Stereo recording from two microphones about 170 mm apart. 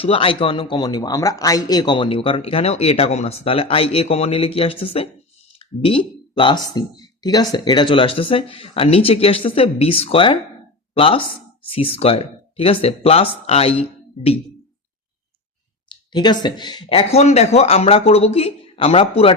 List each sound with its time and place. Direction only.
0.0 s a man's voice: 30° left (ahead or behind)
15.9 s a man's voice: 25° left (ahead or behind)